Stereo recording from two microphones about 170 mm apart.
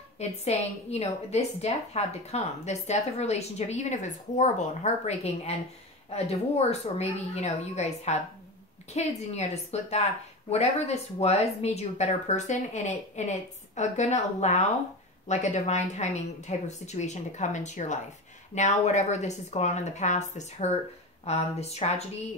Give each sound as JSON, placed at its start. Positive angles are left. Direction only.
{"t": 0.2, "sound": "a woman's voice", "side_deg": 40}